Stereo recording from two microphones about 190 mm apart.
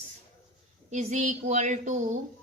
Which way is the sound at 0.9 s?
40° right (ahead or behind).